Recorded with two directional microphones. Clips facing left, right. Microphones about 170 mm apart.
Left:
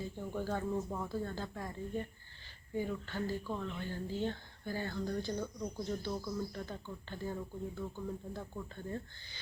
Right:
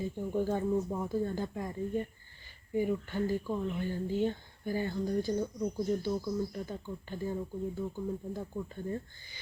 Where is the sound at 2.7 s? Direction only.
15° right (ahead or behind).